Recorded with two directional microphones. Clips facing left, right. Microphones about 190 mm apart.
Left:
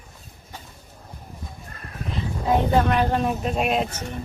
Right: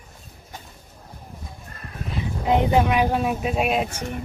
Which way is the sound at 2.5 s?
15° right (ahead or behind).